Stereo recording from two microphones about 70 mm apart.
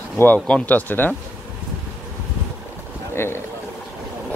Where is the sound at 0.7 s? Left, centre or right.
Left.